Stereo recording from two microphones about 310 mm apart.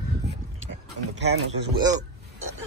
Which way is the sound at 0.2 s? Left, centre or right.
Right.